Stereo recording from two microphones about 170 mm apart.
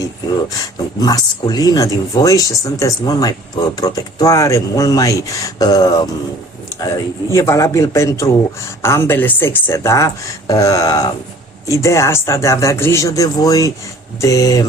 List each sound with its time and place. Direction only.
1.0 s a woman's voice: 25° left (ahead or behind)